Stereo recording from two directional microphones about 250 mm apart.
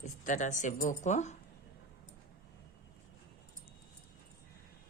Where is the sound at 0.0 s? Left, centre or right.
Left.